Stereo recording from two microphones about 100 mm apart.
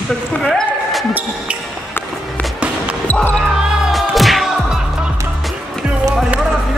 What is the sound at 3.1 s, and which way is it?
Speech, 15° left (ahead or behind).